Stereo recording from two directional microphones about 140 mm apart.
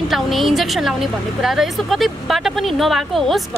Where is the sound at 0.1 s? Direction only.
Centre (ahead or behind).